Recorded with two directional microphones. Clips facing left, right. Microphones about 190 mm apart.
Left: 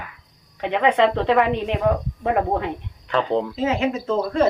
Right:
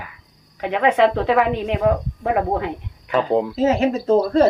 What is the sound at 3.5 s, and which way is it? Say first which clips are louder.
Speech: right 4 dB; 40° right (ahead or behind).